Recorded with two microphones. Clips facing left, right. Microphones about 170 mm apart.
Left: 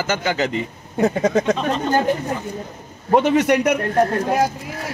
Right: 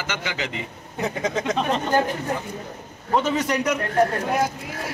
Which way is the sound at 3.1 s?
65° left (ahead or behind).